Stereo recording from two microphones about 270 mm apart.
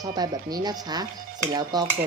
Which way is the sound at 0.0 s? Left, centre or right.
Centre.